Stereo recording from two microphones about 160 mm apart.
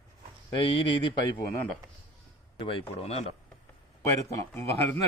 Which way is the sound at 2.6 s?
35° left (ahead or behind).